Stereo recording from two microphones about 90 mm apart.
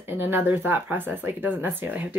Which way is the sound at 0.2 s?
25° right (ahead or behind).